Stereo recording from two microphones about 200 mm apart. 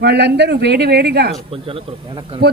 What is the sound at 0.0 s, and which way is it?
Speech, 55° right (ahead or behind).